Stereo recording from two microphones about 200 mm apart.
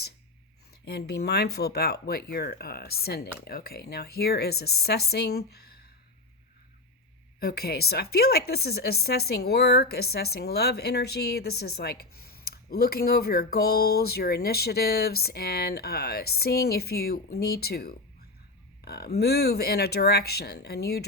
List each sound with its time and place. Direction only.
0.9 s a woman's voice: 55° left (ahead or behind)
7.3 s a woman's voice: 50° left (ahead or behind)